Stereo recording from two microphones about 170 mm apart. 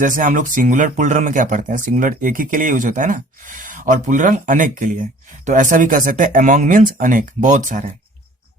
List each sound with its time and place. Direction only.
0.0 s speech: 50° right (ahead or behind)